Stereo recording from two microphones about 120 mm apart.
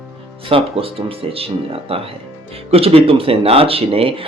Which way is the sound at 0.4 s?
50° right (ahead or behind).